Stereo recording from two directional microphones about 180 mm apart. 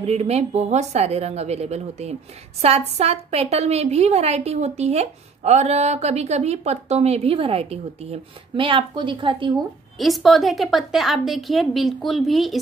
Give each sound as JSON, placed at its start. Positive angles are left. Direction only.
{"t": 0.0, "sound": "a woman's voice", "side_deg": -35}
{"t": 9.9, "sound": "a woman's voice", "side_deg": 0}